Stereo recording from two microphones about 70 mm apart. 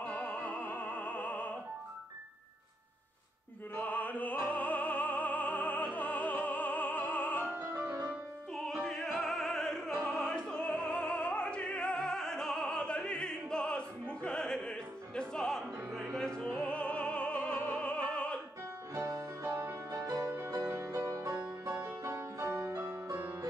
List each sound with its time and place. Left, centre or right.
0.0 s music: centre
3.7 s music: left
8.8 s opera: centre
18.9 s music: right
19.5 s music: right
22.0 s music: right